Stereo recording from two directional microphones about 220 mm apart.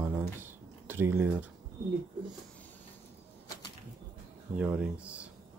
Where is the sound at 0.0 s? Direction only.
10° right (ahead or behind).